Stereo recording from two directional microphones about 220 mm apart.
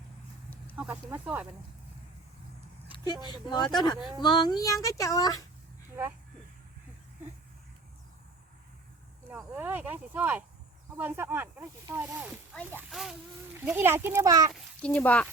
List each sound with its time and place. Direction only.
0.5 s a sound: 5° left (ahead or behind)
1.1 s speech: 5° right (ahead or behind)
2.9 s speech: 20° left (ahead or behind)
9.3 s speech: 10° right (ahead or behind)
14.5 s speech: 5° left (ahead or behind)